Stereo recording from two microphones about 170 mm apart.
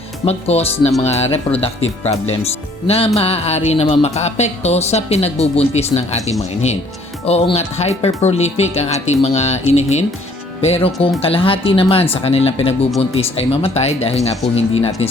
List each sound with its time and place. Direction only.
0.3 s speech: 35° left (ahead or behind)